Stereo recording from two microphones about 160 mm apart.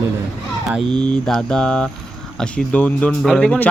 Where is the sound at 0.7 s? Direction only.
Centre (ahead or behind).